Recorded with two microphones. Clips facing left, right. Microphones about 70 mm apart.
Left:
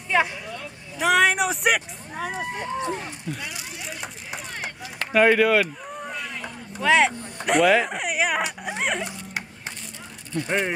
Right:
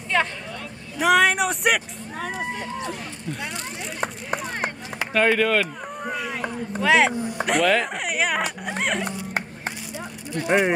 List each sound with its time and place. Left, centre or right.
0.1 s a sound: centre
0.9 s speech: centre
2.5 s speech: left
3.3 s speech: centre
5.1 s speech: centre
6.3 s a sound: right
6.8 s speech: centre
7.4 s speech: centre
10.4 s speech: centre